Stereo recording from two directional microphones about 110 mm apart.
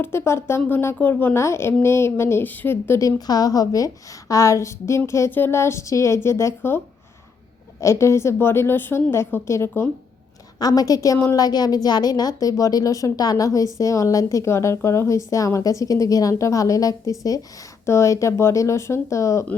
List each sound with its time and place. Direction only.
0.0 s a woman's voice: 20° left (ahead or behind)
10.6 s a woman's voice: 35° left (ahead or behind)